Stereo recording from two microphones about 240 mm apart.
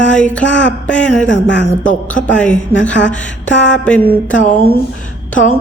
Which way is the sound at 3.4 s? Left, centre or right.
Left.